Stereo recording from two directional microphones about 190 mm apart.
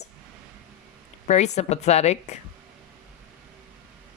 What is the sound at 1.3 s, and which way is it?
Speech, 35° left (ahead or behind).